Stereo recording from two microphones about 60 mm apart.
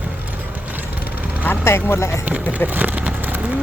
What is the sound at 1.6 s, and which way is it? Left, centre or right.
Speech, left.